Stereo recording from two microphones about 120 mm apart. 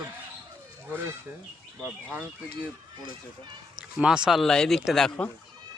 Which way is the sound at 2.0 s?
5° right (ahead or behind).